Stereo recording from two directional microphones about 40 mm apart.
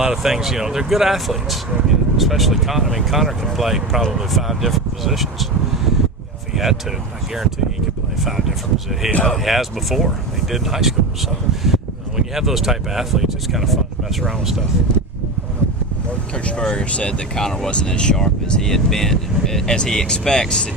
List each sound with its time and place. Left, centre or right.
0.0 s speech: centre
6.5 s speech: centre
8.2 s speech: centre
16.3 s speech: left
17.3 s speech: centre
17.7 s speech: left